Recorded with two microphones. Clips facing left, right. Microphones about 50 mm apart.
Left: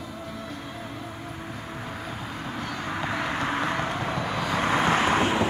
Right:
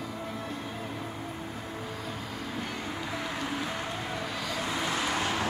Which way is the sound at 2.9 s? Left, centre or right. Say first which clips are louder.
Left 9 dB; left.